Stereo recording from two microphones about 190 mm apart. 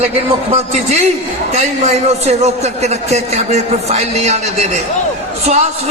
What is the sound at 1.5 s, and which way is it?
A man's voice, 35° right (ahead or behind).